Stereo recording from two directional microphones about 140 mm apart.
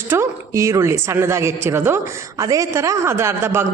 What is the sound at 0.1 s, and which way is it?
A woman's voice, 20° right (ahead or behind).